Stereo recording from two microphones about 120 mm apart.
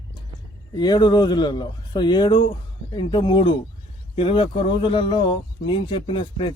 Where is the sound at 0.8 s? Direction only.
35° left (ahead or behind).